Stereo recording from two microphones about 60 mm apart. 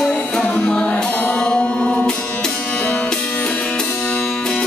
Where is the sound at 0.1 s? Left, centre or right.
Centre.